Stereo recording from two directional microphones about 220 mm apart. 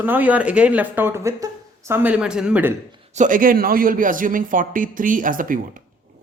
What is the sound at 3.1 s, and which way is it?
A man's voice, 35° right (ahead or behind).